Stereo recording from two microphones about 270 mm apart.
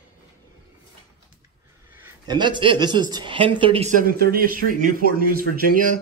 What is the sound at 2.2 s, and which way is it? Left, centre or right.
Speech, centre.